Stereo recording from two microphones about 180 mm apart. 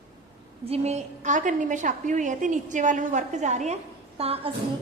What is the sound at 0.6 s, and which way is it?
A woman's voice, 35° right (ahead or behind).